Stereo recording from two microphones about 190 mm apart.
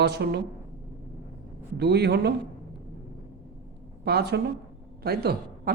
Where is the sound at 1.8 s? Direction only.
60° right (ahead or behind).